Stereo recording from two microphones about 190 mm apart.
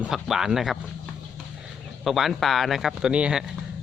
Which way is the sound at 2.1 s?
Centre (ahead or behind).